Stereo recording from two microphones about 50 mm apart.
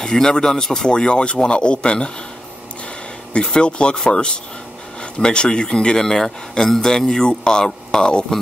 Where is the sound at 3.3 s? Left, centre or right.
Centre.